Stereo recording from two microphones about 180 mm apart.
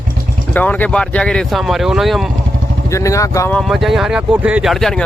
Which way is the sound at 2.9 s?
15° left (ahead or behind).